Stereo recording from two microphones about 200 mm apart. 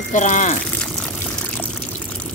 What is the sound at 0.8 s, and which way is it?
Pour, 5° left (ahead or behind).